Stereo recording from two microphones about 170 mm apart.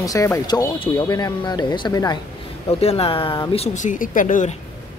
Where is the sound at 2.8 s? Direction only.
35° left (ahead or behind).